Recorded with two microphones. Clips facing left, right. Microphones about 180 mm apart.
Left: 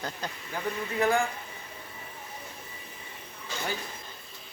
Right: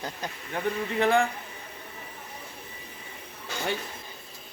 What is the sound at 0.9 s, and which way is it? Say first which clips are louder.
Speech: right 2 dB; 30° right (ahead or behind).